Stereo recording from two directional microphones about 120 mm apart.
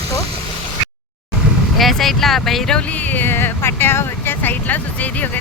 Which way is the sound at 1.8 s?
Centre (ahead or behind).